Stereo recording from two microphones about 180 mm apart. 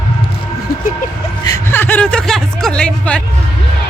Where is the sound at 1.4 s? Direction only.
15° left (ahead or behind).